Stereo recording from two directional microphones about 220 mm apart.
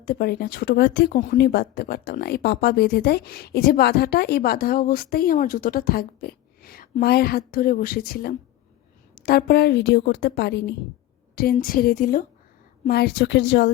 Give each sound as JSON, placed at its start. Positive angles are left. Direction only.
{"t": 0.0, "sound": "speech", "side_deg": 45}